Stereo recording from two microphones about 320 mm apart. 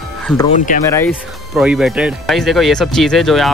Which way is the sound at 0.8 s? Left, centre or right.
Centre.